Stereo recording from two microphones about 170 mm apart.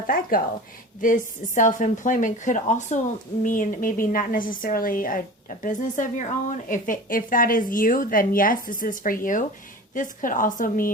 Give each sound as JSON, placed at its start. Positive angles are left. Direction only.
{"t": 0.1, "sound": "a woman's voice", "side_deg": 60}